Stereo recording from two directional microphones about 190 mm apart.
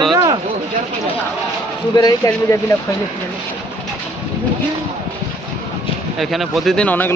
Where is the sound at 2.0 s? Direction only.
20° left (ahead or behind).